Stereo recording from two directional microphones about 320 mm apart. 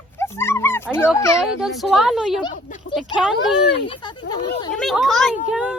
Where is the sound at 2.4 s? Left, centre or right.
Left.